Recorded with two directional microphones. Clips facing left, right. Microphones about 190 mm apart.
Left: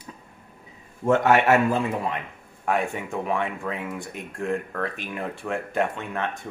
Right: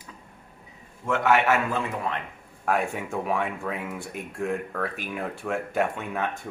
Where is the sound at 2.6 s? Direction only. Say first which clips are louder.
Left 1 dB; 5° right (ahead or behind).